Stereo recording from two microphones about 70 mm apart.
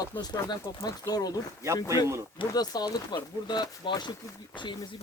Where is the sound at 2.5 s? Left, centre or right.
Left.